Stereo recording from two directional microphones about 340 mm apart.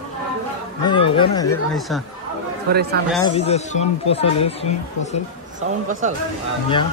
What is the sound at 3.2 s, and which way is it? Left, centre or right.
Speech, centre.